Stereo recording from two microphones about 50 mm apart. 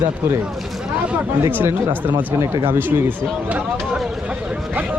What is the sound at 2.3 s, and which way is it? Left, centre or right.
Speech, right.